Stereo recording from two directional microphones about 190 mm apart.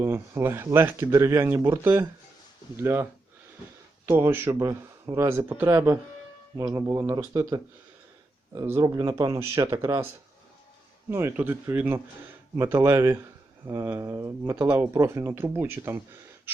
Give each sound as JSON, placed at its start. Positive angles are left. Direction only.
{"t": 0.0, "sound": "speech", "side_deg": -15}
{"t": 11.1, "sound": "speech", "side_deg": -10}